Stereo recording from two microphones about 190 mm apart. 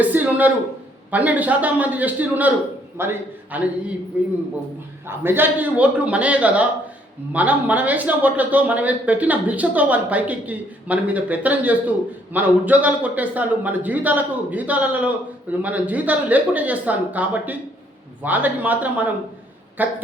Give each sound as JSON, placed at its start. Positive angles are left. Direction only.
{"t": 0.0, "sound": "a man's voice", "side_deg": -10}
{"t": 5.0, "sound": "a man's voice", "side_deg": -10}